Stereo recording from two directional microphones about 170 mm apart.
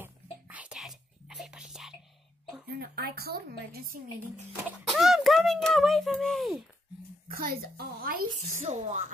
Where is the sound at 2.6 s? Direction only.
65° right (ahead or behind).